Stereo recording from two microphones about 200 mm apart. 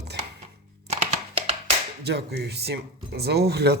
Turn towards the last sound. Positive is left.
turn(degrees=-55)  # may be behind; listen again after turning